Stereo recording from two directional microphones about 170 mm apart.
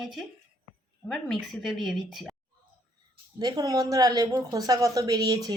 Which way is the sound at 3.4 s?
25° right (ahead or behind).